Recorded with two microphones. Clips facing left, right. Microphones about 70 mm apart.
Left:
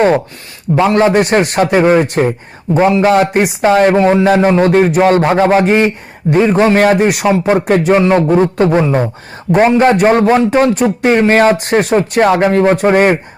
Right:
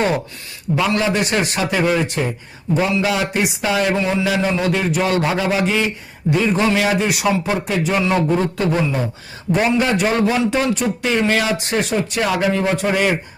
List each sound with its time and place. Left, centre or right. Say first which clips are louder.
0.8 s speech: left 9 dB; left
1.8 s speech: left 7 dB; left